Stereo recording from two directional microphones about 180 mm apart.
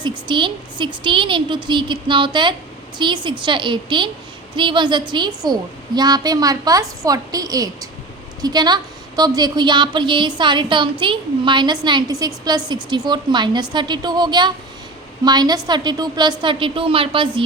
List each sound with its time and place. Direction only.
0.0 s a woman's voice: 25° right (ahead or behind)